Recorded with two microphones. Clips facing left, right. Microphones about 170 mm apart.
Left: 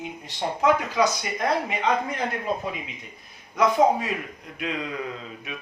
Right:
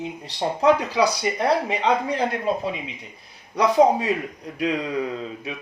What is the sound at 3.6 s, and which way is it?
Speech, 35° right (ahead or behind).